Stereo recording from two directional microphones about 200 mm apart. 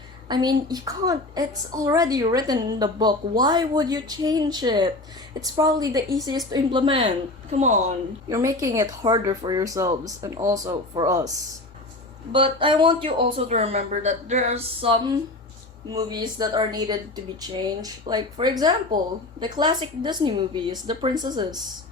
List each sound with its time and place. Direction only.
0.3 s a woman's voice: 20° right (ahead or behind)
7.5 s speech: 35° right (ahead or behind)
8.3 s a woman's voice: 15° right (ahead or behind)